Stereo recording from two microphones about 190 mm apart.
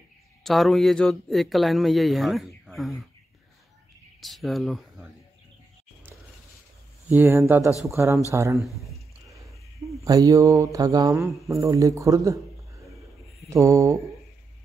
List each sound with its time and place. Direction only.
0.4 s speech: centre (ahead or behind)
4.2 s speech: centre (ahead or behind)
7.2 s speech: 10° right (ahead or behind)
8.5 s speech: centre (ahead or behind)
9.3 s a sound: 15° right (ahead or behind)
9.9 s speech: 20° right (ahead or behind)
13.5 s speech: 15° right (ahead or behind)